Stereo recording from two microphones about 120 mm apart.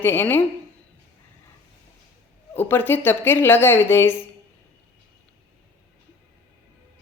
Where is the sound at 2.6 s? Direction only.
15° left (ahead or behind).